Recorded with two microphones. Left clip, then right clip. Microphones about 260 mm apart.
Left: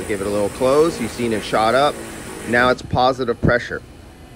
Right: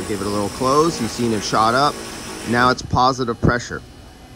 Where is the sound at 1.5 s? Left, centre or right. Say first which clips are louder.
Even; centre.